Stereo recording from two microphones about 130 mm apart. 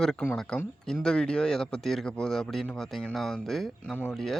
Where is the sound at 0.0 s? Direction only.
5° left (ahead or behind).